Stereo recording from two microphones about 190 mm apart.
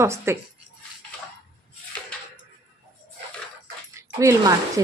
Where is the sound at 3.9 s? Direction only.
15° right (ahead or behind).